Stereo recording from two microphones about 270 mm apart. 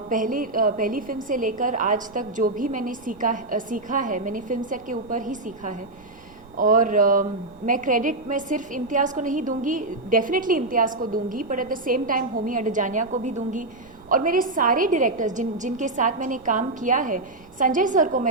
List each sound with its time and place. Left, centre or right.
0.1 s a woman's voice: right